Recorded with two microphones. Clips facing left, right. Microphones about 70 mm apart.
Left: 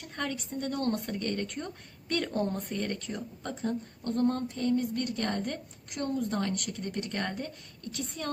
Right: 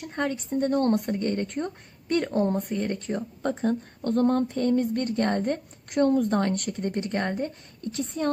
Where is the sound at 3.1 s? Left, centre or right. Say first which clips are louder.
Right 9 dB; right.